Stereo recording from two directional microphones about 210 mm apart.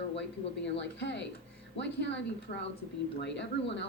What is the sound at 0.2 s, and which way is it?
A woman's voice, 55° left (ahead or behind).